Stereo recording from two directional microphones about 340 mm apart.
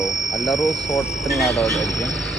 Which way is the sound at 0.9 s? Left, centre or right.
Centre.